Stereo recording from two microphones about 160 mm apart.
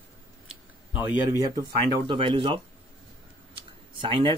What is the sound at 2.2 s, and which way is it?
Speech, 35° right (ahead or behind).